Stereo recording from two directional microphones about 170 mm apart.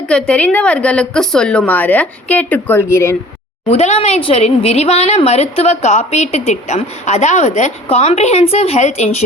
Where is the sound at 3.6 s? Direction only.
40° left (ahead or behind).